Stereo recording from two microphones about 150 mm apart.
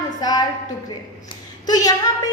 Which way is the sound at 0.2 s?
25° left (ahead or behind).